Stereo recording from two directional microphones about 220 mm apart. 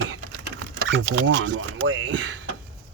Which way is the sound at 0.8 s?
55° right (ahead or behind).